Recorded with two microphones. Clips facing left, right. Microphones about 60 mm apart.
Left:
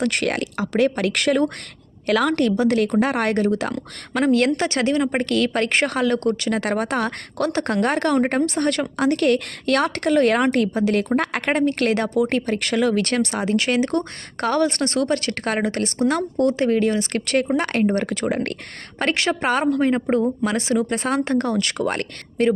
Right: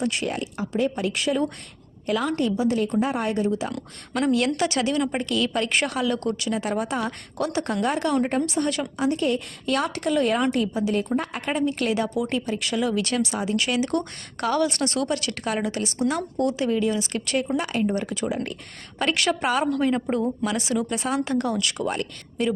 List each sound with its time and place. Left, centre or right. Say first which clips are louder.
0.0 s speech: left 4 dB; left
4.2 s a woman's voice: left 4 dB; left
5.1 s a woman's voice: left 4 dB; left
13.6 s a woman's voice: left 3 dB; left
18.9 s a woman's voice: left 2 dB; left